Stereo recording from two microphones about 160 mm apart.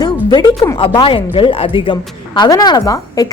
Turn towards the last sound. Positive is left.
turn(degrees=20)  # may be behind; listen again after turning